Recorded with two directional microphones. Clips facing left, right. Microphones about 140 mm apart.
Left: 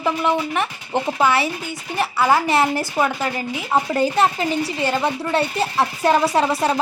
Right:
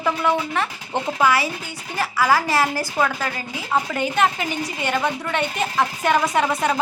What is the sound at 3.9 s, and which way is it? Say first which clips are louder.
A woman's voice: left 3 dB; 35° left (ahead or behind).